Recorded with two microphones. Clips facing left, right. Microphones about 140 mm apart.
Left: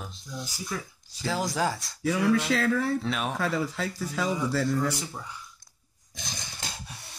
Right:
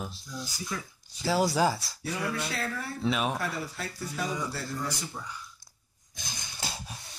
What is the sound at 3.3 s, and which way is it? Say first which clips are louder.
Speech: left 5 dB; 90° left.